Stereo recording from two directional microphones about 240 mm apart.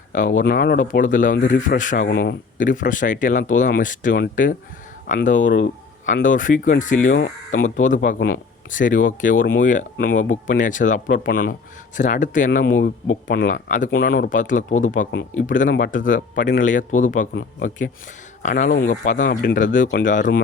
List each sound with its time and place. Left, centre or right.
0.1 s speech: left
5.4 s speech: left
6.1 s speech: left
7.1 s speech: left
7.8 s speech: left
18.4 s speech: left